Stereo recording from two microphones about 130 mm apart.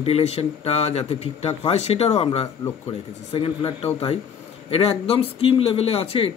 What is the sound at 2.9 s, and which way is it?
Speech, 45° left (ahead or behind).